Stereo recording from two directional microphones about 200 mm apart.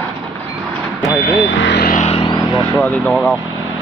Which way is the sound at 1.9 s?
35° left (ahead or behind).